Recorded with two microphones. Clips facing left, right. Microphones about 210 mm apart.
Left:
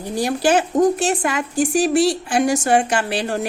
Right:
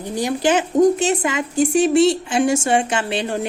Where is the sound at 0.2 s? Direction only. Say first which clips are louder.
Left 1 dB; 20° right (ahead or behind).